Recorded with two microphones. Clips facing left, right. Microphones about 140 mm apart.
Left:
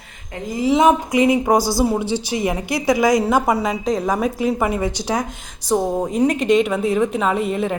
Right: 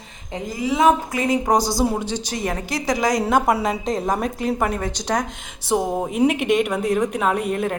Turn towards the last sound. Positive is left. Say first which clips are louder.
# left 1 dB
turn(degrees=0)  # may be behind; listen again after turning